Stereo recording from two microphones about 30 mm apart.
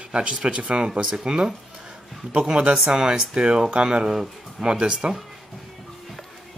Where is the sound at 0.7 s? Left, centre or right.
Right.